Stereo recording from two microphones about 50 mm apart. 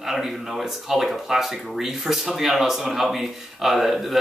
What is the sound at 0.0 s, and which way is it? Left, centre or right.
A man's voice, centre.